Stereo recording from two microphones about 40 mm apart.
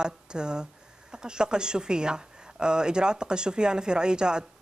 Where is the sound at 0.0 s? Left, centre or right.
Right.